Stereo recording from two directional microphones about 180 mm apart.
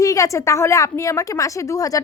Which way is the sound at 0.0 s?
20° left (ahead or behind).